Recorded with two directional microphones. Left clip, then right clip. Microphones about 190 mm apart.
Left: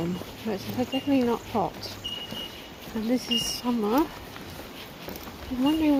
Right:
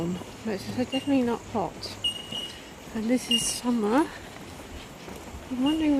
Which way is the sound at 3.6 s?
15° right (ahead or behind).